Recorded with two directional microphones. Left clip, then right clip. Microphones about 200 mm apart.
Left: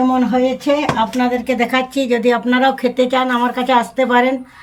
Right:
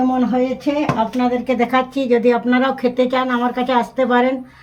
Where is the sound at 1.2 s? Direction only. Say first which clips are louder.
Left 1 dB; 15° right (ahead or behind).